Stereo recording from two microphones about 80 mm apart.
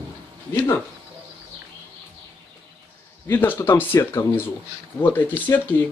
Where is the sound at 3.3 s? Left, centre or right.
Left.